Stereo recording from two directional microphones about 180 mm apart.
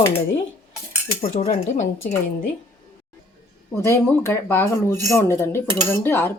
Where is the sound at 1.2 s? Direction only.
35° left (ahead or behind).